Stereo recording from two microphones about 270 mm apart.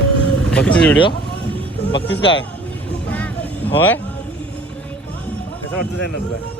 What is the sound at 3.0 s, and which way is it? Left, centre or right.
Vehicle, centre.